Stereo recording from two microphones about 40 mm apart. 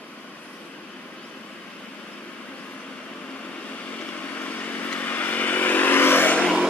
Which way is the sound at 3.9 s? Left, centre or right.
Left.